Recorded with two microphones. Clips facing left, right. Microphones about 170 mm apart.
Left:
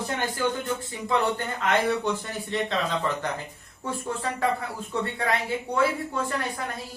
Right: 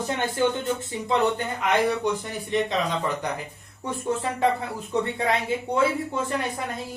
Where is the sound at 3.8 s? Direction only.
20° right (ahead or behind).